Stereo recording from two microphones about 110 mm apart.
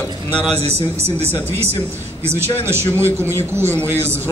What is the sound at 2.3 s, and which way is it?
A man's voice, 20° right (ahead or behind).